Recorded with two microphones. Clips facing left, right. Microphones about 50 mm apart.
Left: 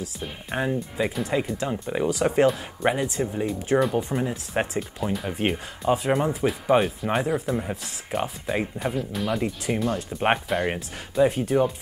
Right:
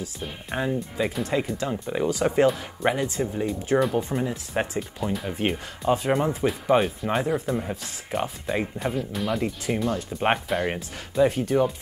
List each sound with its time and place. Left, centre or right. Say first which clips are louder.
0.5 s speech: left 1 dB; centre
11.2 s speech: even; left